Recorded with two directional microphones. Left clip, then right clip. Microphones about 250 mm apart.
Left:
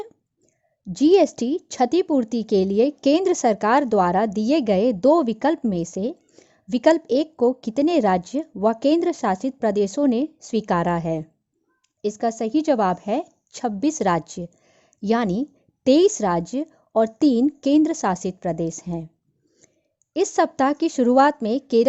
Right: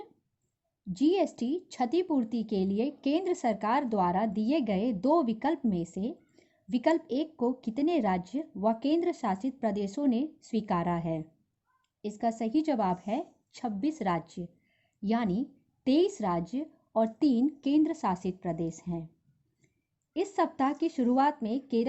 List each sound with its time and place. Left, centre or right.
0.9 s a woman's voice: left
20.1 s a woman's voice: left